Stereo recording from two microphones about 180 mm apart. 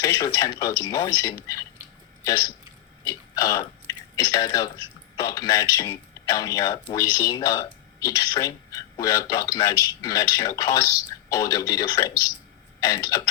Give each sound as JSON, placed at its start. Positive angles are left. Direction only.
{"t": 0.0, "sound": "speech", "side_deg": 20}